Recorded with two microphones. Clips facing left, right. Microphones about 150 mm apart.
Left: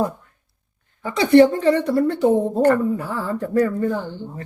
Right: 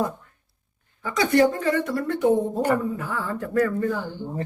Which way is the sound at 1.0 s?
30° left (ahead or behind).